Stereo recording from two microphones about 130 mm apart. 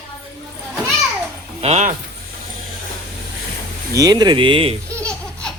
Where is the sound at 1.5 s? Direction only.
55° right (ahead or behind).